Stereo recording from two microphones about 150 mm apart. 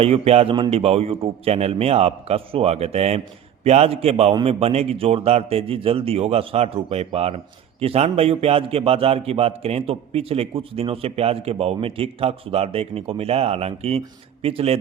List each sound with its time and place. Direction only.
0.0 s a man's voice: 45° right (ahead or behind)